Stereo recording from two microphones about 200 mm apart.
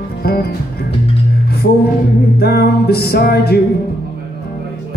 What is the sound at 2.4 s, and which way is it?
Music, 50° left (ahead or behind).